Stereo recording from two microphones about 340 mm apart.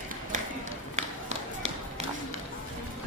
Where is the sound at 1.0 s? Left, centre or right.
Centre.